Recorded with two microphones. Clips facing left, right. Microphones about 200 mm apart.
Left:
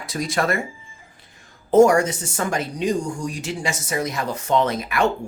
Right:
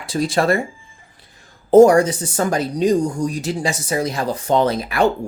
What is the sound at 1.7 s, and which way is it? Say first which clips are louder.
Speech: right 4 dB; 35° right (ahead or behind).